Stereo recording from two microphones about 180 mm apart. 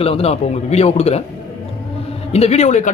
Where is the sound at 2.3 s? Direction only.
35° left (ahead or behind).